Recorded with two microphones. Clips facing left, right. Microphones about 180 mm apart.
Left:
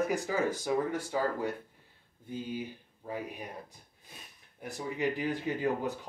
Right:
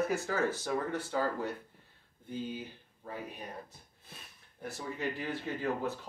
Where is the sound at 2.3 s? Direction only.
10° left (ahead or behind).